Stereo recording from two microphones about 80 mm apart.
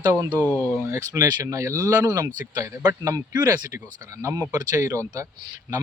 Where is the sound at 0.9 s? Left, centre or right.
Right.